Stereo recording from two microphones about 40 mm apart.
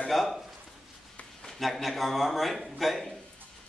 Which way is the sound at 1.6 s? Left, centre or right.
Centre.